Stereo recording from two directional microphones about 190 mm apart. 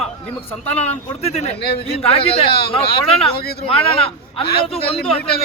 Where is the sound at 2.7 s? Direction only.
30° left (ahead or behind).